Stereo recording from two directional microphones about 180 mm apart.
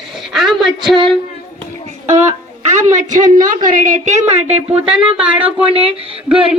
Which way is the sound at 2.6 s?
40° right (ahead or behind).